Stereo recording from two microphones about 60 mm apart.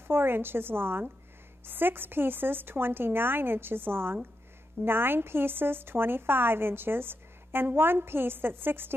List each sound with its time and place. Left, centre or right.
0.1 s a woman's voice: right